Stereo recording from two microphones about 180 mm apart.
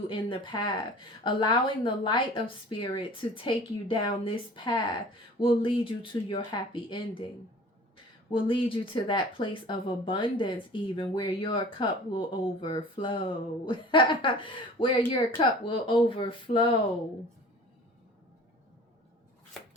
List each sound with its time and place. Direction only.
0.1 s speech: 25° left (ahead or behind)
8.3 s speech: 30° left (ahead or behind)